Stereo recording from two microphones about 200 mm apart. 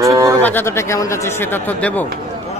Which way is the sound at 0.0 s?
15° right (ahead or behind).